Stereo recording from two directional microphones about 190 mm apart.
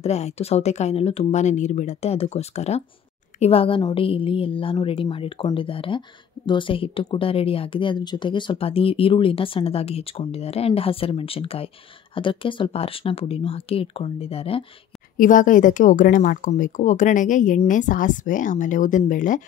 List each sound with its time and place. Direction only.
0.0 s a woman's voice: 35° left (ahead or behind)
15.1 s a woman's voice: 45° left (ahead or behind)